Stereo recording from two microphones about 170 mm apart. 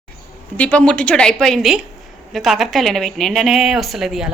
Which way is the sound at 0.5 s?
10° left (ahead or behind).